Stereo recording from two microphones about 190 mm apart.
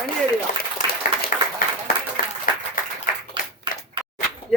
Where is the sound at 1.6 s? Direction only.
50° left (ahead or behind).